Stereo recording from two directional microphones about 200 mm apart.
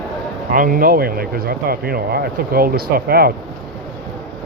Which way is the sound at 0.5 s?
45° right (ahead or behind).